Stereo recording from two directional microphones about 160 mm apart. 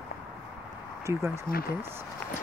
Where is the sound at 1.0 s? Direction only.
15° right (ahead or behind).